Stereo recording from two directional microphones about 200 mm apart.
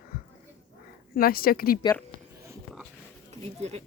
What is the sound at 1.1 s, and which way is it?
Speech, 45° left (ahead or behind).